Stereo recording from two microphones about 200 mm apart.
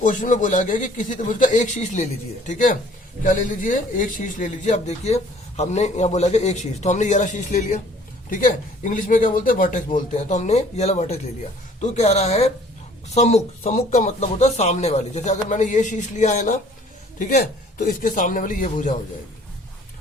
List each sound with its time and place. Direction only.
0.0 s a man's voice: 40° left (ahead or behind)